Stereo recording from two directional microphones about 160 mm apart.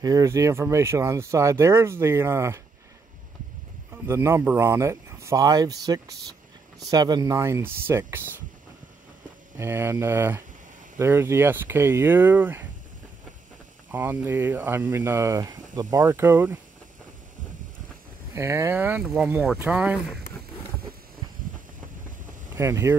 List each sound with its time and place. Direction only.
0.0 s speech: 20° right (ahead or behind)
3.9 s speech: 15° right (ahead or behind)
9.6 s speech: 15° right (ahead or behind)
13.9 s speech: 10° right (ahead or behind)
18.3 s speech: 15° right (ahead or behind)
22.6 s speech: 15° right (ahead or behind)